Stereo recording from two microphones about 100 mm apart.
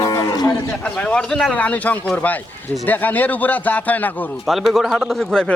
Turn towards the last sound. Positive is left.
turn(degrees=5)  # may be behind; listen again after turning